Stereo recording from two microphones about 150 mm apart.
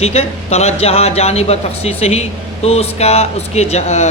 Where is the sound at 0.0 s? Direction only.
45° left (ahead or behind).